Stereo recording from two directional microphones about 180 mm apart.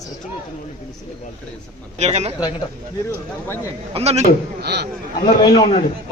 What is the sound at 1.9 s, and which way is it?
Speech, 40° right (ahead or behind).